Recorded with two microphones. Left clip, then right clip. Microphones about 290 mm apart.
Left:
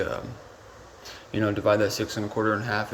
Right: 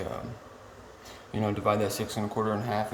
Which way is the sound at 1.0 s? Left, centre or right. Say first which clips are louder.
Left 5 dB; centre.